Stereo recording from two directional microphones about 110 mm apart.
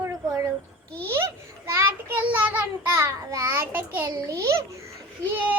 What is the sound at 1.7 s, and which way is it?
Child singing, 20° right (ahead or behind).